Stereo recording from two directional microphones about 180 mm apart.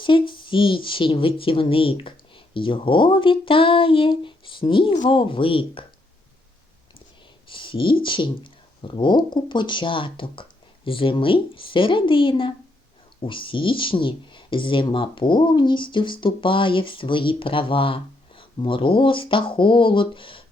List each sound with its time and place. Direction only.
0.0 s speech: 25° left (ahead or behind)
7.4 s a sound: 30° left (ahead or behind)
8.0 s speech: 25° left (ahead or behind)